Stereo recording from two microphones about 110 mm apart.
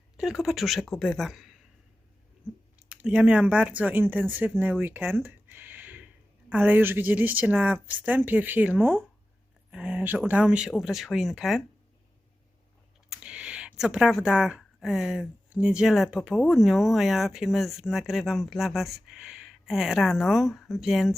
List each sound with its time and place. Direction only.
0.2 s speech: 5° right (ahead or behind)
2.7 s a woman's voice: 10° right (ahead or behind)
13.1 s speech: 10° right (ahead or behind)